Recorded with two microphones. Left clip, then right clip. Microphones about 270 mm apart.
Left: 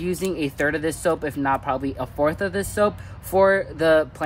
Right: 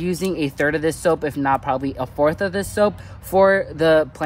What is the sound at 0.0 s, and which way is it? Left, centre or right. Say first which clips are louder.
Speech: right 2 dB; right.